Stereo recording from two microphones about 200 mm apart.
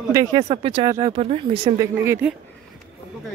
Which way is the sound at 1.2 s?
30° right (ahead or behind).